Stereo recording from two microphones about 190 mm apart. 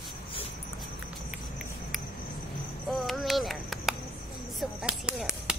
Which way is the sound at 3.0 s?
Centre (ahead or behind).